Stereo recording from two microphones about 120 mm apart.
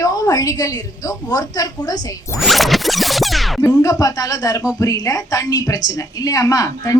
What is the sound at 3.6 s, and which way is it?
A woman's voice, 25° left (ahead or behind).